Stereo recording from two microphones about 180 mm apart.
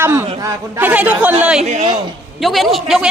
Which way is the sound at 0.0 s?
15° right (ahead or behind).